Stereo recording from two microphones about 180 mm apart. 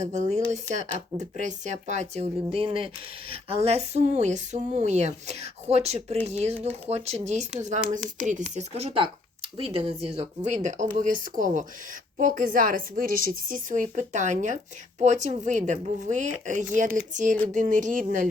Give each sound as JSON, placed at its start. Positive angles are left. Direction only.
{"t": 0.0, "sound": "a woman's voice", "side_deg": -40}
{"t": 8.5, "sound": "a woman's voice", "side_deg": -30}